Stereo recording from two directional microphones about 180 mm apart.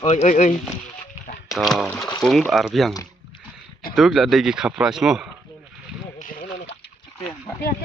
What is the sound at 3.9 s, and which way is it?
Speech, centre (ahead or behind).